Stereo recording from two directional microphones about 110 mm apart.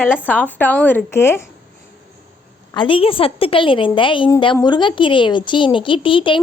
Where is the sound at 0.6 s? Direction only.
15° left (ahead or behind).